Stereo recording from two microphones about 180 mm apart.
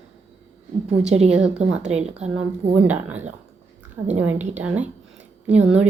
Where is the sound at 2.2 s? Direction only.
5° right (ahead or behind).